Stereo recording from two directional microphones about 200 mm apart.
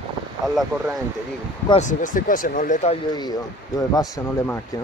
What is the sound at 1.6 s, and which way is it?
Speech, 35° left (ahead or behind).